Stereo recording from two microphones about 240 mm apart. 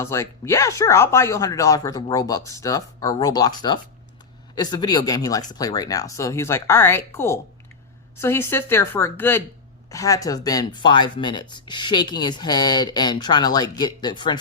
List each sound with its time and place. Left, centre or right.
0.0 s speech: centre